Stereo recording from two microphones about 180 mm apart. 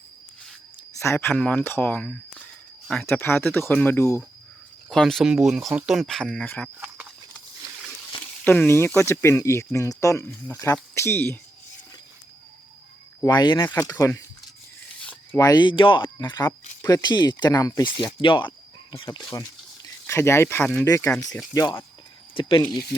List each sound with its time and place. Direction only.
0.9 s speech: 15° left (ahead or behind)
3.1 s speech: 15° left (ahead or behind)
6.7 s walk: 10° right (ahead or behind)
8.4 s speech: 10° left (ahead or behind)
13.2 s speech: 25° left (ahead or behind)
13.7 s speech: 15° left (ahead or behind)
15.4 s speech: 20° left (ahead or behind)
20.1 s speech: 15° left (ahead or behind)